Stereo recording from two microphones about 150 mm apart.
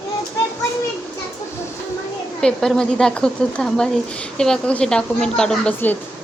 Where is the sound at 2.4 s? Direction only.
5° left (ahead or behind).